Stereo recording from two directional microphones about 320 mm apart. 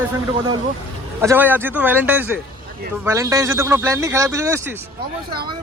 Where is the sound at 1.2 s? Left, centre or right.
Centre.